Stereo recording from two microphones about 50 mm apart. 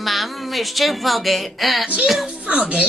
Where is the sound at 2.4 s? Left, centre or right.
Right.